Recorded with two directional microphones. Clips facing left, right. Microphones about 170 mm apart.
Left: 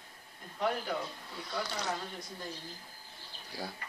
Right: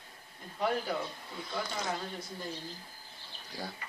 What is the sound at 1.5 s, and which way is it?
Speech, centre (ahead or behind).